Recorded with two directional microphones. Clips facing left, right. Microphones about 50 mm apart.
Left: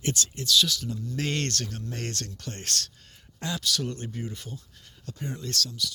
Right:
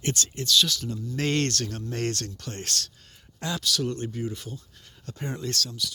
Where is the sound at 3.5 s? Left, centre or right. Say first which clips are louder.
Right 2 dB; left.